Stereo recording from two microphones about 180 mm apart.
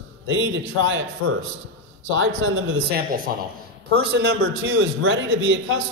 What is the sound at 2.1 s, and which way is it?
Speech, 90° right.